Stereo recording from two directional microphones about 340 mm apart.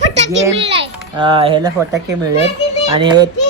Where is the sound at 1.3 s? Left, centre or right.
Centre.